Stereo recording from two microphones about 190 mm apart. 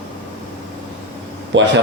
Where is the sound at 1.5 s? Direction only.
70° right (ahead or behind).